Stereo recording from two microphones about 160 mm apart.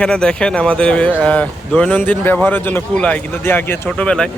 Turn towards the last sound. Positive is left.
turn(degrees=5)  # may be behind; listen again after turning